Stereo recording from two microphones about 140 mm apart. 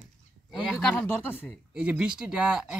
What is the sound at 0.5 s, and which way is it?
Speech, 5° right (ahead or behind).